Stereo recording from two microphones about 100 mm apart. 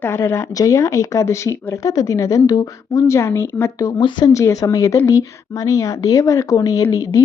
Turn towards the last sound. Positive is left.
turn(degrees=35)  # may be behind; listen again after turning